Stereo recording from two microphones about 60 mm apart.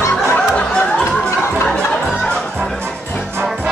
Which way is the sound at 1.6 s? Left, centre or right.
Centre.